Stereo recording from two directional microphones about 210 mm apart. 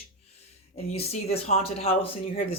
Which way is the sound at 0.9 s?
30° left (ahead or behind).